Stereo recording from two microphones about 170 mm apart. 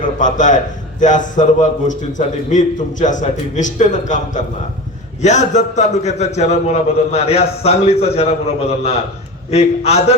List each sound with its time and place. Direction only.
0.0 s a man's voice: 50° left (ahead or behind)